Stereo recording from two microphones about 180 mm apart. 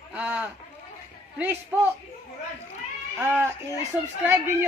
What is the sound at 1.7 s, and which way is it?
Speech, 10° right (ahead or behind).